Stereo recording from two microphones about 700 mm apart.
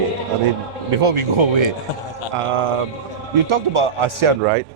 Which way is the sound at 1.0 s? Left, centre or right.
Right.